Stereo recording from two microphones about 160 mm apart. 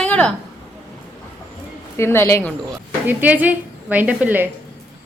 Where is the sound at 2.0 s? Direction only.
15° left (ahead or behind).